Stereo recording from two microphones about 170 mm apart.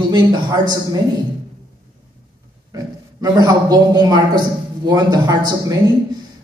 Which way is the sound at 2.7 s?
25° right (ahead or behind).